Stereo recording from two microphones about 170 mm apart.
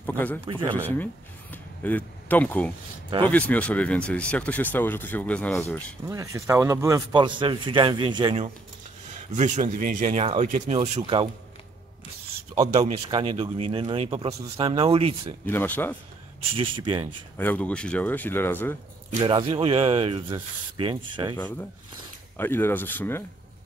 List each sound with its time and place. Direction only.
0.0 s a sound: 10° left (ahead or behind)
0.5 s speech: 30° right (ahead or behind)
1.5 s speech: 10° left (ahead or behind)
6.0 s speech: 20° right (ahead or behind)
9.3 s speech: 45° right (ahead or behind)
12.5 s speech: 40° right (ahead or behind)
15.4 s speech: 10° left (ahead or behind)
16.5 s speech: 30° right (ahead or behind)
17.4 s speech: 10° left (ahead or behind)
19.1 s speech: 30° right (ahead or behind)
22.4 s speech: 15° left (ahead or behind)